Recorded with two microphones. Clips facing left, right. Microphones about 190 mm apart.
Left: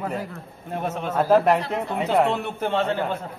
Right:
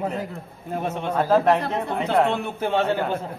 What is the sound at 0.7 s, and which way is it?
A man's voice, centre (ahead or behind).